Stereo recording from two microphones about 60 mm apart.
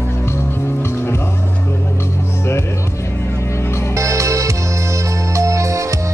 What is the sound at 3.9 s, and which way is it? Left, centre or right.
Music, right.